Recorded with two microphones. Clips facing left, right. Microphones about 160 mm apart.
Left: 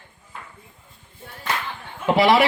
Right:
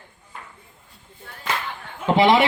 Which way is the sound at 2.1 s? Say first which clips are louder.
Right 1 dB; 25° right (ahead or behind).